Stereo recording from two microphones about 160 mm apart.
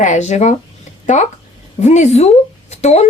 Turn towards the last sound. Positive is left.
turn(degrees=45)  # may be behind; listen again after turning